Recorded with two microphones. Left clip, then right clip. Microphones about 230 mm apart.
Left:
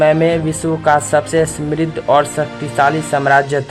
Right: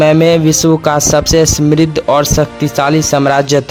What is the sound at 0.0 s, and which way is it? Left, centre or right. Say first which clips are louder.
Speech: right 4 dB; right.